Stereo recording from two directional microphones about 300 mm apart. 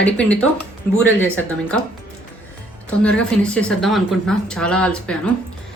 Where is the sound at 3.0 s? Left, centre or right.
Centre.